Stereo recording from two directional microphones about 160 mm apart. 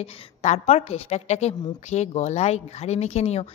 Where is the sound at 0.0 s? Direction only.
40° left (ahead or behind).